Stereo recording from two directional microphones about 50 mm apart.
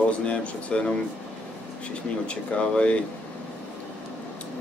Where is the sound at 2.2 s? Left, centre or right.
Left.